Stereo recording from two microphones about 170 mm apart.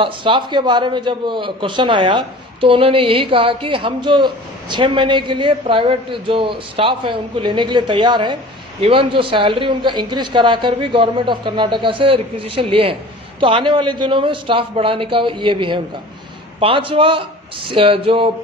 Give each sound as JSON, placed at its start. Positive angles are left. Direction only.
{"t": 0.0, "sound": "a man's voice", "side_deg": -30}